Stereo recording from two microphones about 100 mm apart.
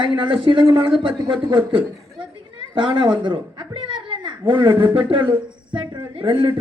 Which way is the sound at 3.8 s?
55° right (ahead or behind).